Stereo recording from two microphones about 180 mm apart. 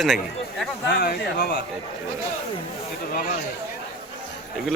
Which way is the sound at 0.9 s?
55° left (ahead or behind).